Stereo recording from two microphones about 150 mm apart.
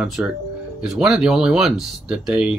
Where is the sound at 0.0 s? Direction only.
5° right (ahead or behind).